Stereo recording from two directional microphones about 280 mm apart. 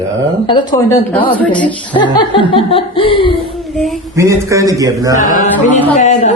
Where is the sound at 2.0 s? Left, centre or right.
Centre.